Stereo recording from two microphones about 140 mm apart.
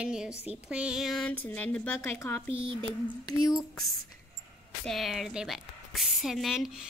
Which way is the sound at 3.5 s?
Centre (ahead or behind).